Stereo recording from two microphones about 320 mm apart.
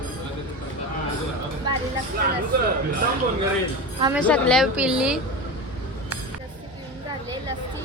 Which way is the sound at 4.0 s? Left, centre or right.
Centre.